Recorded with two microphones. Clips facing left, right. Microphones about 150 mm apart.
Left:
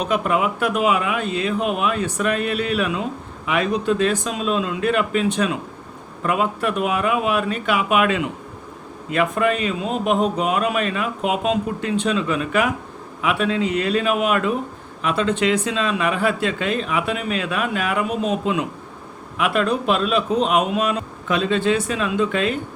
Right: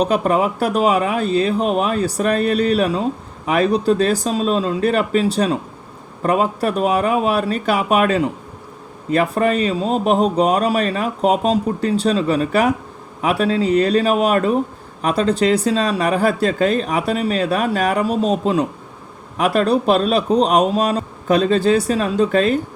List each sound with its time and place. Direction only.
0.0 s speech: 35° right (ahead or behind)